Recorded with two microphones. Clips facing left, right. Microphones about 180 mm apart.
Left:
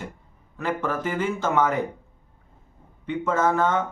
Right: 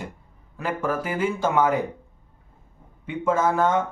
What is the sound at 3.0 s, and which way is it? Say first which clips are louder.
Speech: right 1 dB; 10° right (ahead or behind).